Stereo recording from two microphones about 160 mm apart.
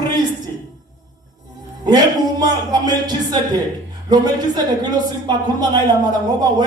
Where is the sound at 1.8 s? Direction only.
25° right (ahead or behind).